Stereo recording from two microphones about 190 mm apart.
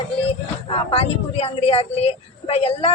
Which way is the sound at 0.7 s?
30° left (ahead or behind).